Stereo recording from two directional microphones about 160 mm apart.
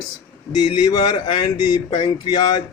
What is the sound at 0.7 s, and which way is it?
Speech, 30° left (ahead or behind).